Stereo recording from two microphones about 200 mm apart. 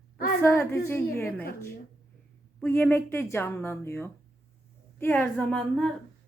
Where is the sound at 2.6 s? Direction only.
10° left (ahead or behind).